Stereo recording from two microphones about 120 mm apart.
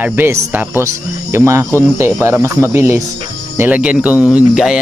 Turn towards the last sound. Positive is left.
turn(degrees=-5)  # may be behind; listen again after turning